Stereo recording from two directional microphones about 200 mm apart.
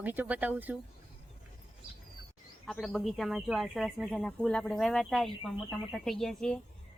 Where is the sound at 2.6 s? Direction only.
Centre (ahead or behind).